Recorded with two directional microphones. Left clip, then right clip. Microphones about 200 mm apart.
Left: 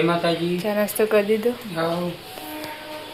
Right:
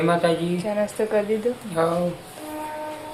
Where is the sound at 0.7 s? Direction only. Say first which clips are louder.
Left 3 dB; 25° left (ahead or behind).